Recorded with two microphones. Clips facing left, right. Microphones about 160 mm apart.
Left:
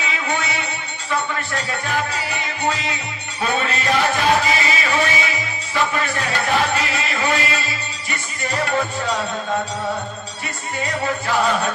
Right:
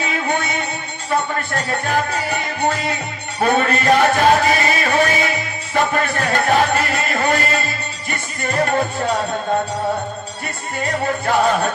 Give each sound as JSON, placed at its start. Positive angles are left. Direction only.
{"t": 0.0, "sound": "music", "side_deg": -50}
{"t": 10.8, "sound": "music", "side_deg": -45}